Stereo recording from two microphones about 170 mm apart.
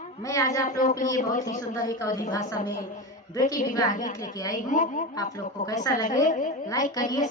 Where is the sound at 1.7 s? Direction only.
20° left (ahead or behind).